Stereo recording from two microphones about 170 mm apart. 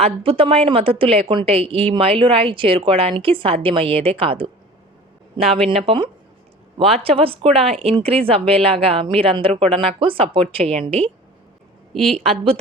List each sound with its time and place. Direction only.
0.0 s a woman's voice: 35° right (ahead or behind)
11.9 s a woman's voice: centre (ahead or behind)